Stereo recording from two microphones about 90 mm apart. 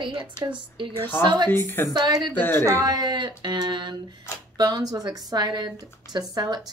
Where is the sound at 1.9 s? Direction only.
55° right (ahead or behind).